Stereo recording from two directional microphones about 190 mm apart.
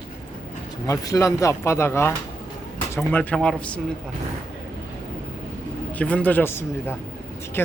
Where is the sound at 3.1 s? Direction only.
5° left (ahead or behind).